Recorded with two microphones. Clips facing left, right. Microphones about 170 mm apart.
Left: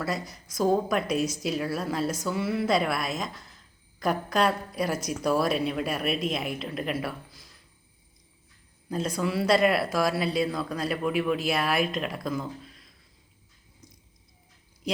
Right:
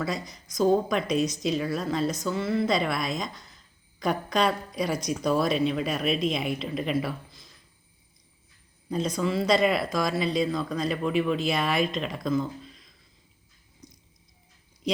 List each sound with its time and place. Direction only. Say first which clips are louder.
0.0 s a woman's voice: even; 5° left (ahead or behind)
8.9 s speech: right 1 dB; 5° left (ahead or behind)